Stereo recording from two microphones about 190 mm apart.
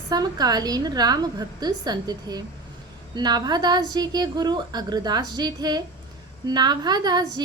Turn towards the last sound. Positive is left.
turn(degrees=-20)  # may be behind; listen again after turning